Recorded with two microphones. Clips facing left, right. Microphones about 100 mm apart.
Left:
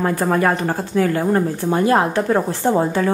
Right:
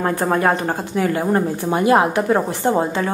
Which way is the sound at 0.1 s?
25° right (ahead or behind).